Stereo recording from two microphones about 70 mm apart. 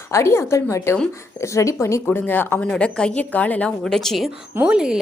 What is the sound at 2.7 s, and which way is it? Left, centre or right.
A woman's voice, centre.